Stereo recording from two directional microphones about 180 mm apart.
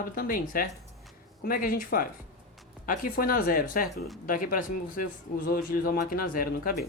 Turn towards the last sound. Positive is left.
turn(degrees=55)  # may be behind; listen again after turning